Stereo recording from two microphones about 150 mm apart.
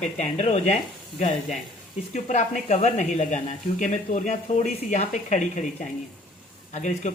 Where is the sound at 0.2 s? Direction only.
45° left (ahead or behind).